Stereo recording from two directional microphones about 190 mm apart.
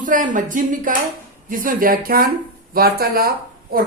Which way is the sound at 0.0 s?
45° right (ahead or behind).